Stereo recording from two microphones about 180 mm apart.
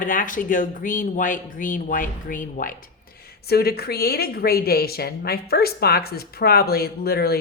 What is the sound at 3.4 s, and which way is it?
A woman's voice, 60° left (ahead or behind).